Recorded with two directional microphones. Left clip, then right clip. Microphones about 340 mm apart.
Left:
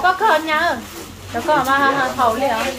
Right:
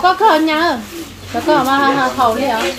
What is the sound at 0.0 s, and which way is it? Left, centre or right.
A woman's voice, right.